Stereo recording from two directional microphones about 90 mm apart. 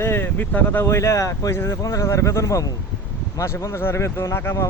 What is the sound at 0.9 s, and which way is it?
Speech, 35° left (ahead or behind).